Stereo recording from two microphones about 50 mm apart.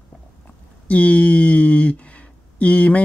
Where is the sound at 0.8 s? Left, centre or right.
Left.